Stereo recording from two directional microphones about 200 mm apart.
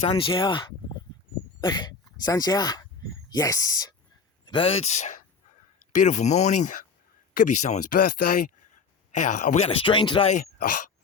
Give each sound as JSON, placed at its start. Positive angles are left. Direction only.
{"t": 0.0, "sound": "speech", "side_deg": 25}